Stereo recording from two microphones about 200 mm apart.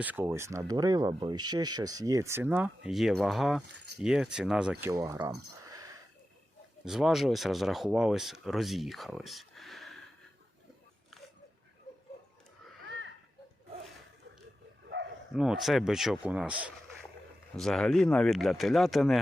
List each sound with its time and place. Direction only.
0.0 s speech: 10° right (ahead or behind)
4.9 s speech: 15° right (ahead or behind)
5.6 s sniff: 15° right (ahead or behind)
6.8 s speech: centre (ahead or behind)
12.8 s a sound: 65° right (ahead or behind)
15.4 s speech: centre (ahead or behind)